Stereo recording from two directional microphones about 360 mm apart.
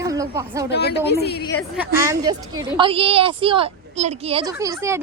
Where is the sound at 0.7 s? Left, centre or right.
Left.